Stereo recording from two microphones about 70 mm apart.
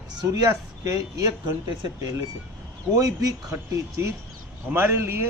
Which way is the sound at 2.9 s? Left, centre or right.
Right.